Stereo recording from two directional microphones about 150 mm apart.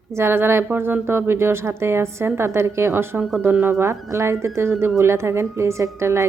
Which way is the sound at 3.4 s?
15° right (ahead or behind).